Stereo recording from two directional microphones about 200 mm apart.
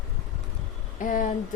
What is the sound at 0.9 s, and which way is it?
Speech, 45° left (ahead or behind).